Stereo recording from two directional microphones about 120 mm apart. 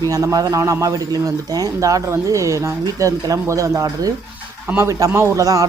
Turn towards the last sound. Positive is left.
turn(degrees=-30)  # may be behind; listen again after turning